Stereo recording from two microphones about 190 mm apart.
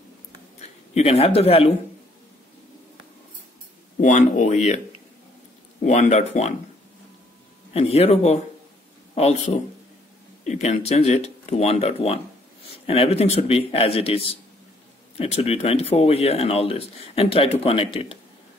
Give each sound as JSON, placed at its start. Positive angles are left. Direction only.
{"t": 0.9, "sound": "speech", "side_deg": 35}
{"t": 4.0, "sound": "speech", "side_deg": 40}
{"t": 5.9, "sound": "speech", "side_deg": 35}
{"t": 7.7, "sound": "speech", "side_deg": 30}